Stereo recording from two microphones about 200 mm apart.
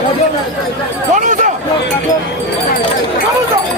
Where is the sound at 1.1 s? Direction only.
40° right (ahead or behind).